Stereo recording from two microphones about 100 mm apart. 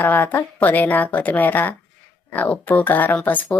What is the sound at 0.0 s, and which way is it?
Speech, 20° left (ahead or behind).